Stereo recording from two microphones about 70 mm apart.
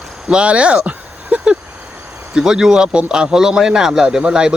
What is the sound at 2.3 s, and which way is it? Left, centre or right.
A man's voice, centre.